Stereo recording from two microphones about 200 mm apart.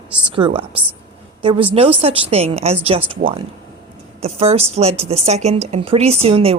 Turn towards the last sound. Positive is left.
turn(degrees=-30)  # may be behind; listen again after turning